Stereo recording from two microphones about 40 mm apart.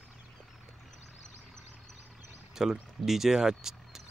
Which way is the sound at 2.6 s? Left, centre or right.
Centre.